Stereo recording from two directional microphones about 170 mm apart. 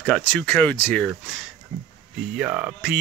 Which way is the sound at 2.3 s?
10° right (ahead or behind).